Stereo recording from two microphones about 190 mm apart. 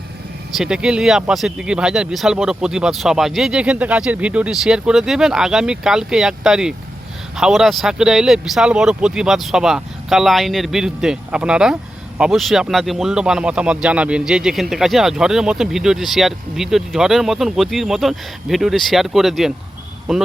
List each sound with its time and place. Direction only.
0.5 s speech: 5° right (ahead or behind)